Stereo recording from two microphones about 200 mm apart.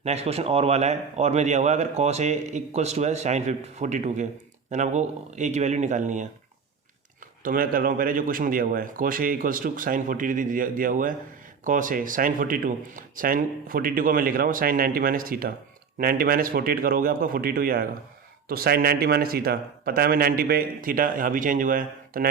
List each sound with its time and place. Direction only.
0.0 s speech: 30° right (ahead or behind)
7.4 s speech: 45° right (ahead or behind)